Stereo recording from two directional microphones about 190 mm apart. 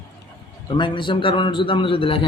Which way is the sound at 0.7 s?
25° left (ahead or behind).